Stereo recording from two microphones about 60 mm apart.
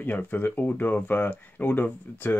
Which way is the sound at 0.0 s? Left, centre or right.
Left.